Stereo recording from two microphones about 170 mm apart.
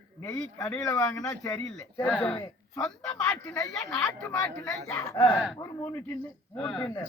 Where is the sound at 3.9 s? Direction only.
5° left (ahead or behind).